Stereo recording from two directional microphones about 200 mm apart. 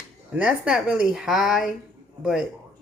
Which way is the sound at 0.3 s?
5° right (ahead or behind).